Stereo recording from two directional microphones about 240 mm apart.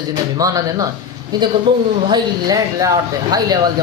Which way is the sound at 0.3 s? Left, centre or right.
Centre.